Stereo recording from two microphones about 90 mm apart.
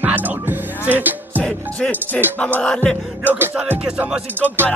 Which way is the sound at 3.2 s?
20° right (ahead or behind).